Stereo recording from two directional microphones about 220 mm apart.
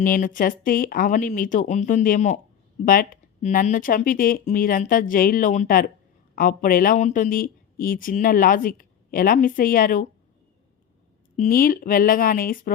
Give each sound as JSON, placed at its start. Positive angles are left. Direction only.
{"t": 0.0, "sound": "speech", "side_deg": 40}
{"t": 11.3, "sound": "speech", "side_deg": 40}